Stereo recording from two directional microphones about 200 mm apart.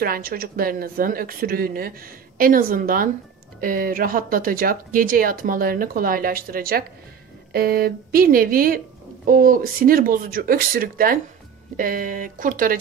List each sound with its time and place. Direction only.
0.0 s speech: 50° right (ahead or behind)